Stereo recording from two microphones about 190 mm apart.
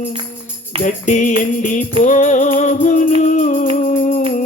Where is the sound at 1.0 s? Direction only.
40° left (ahead or behind).